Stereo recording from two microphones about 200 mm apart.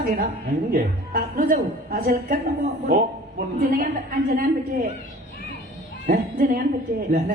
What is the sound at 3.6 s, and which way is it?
Speech, 45° right (ahead or behind).